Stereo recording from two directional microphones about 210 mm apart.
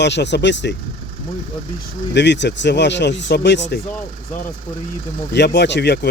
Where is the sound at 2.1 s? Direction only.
55° left (ahead or behind).